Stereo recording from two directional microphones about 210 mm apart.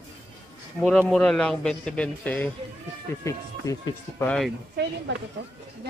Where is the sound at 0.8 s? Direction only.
5° left (ahead or behind).